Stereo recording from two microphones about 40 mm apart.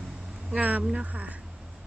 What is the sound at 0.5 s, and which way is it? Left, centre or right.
Speech, right.